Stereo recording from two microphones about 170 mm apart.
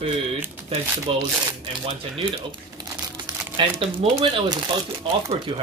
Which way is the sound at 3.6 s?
30° right (ahead or behind).